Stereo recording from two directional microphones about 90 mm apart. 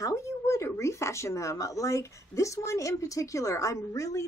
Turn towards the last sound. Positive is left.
turn(degrees=35)  # may be behind; listen again after turning